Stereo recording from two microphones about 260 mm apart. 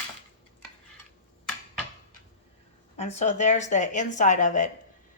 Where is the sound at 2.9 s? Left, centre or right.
Left.